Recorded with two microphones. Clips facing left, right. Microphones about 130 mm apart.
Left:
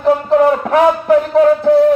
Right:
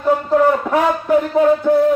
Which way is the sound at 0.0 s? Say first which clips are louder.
Left 3 dB; 75° left (ahead or behind).